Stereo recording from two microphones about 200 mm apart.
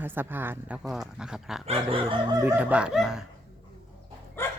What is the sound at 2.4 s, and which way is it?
Speech, 10° right (ahead or behind).